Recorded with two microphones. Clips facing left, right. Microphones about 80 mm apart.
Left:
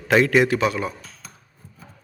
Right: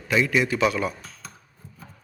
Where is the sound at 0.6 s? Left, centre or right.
Left.